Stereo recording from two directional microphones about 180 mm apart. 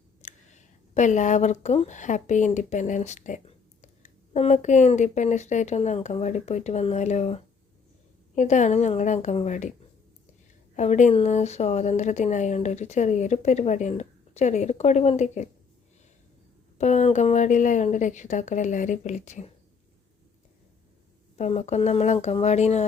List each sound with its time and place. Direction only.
0.2 s a woman's voice: 40° left (ahead or behind)
10.8 s a woman's voice: 40° left (ahead or behind)
16.7 s a woman's voice: 40° left (ahead or behind)
21.3 s a woman's voice: 40° left (ahead or behind)